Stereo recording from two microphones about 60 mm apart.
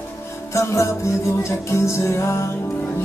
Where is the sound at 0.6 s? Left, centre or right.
Left.